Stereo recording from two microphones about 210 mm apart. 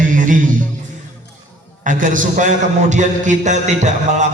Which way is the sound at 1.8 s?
40° right (ahead or behind).